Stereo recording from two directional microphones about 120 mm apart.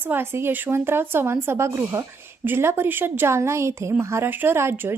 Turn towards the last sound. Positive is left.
turn(degrees=-20)  # may be behind; listen again after turning